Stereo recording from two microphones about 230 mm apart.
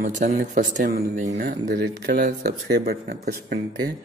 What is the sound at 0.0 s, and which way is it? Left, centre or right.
A man's voice, right.